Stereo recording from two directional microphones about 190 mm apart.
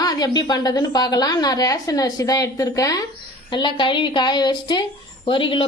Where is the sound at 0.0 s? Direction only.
20° left (ahead or behind).